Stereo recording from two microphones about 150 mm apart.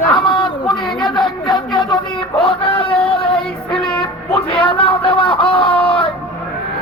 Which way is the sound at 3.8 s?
35° left (ahead or behind).